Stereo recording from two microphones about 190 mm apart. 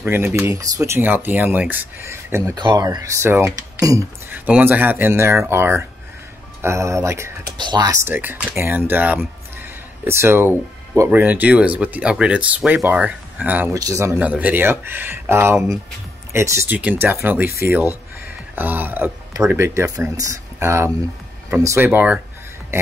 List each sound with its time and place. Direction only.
0.0 s speech: 10° right (ahead or behind)